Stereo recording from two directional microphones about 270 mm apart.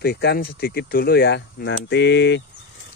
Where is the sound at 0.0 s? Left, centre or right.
Left.